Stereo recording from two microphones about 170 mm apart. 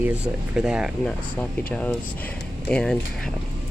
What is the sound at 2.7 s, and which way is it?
Speech, 5° left (ahead or behind).